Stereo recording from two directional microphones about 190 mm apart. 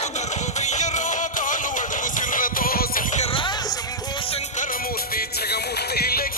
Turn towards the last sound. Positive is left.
turn(degrees=55)  # may be behind; listen again after turning